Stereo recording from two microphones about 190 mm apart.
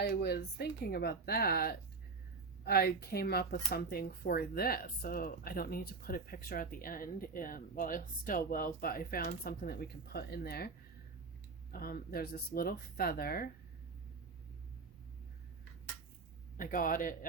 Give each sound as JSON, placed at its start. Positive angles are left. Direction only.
{"t": 0.0, "sound": "speech", "side_deg": 55}
{"t": 11.7, "sound": "speech", "side_deg": 50}
{"t": 16.6, "sound": "speech", "side_deg": 45}